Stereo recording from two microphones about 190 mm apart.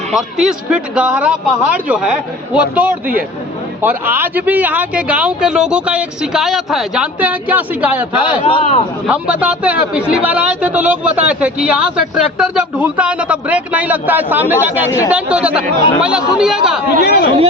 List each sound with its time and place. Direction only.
0.1 s a man's voice: centre (ahead or behind)
8.2 s a man's voice: 25° left (ahead or behind)
9.0 s speech: 5° right (ahead or behind)
14.8 s speech: 15° left (ahead or behind)
15.1 s a man's voice: 5° right (ahead or behind)
17.0 s speech: 55° left (ahead or behind)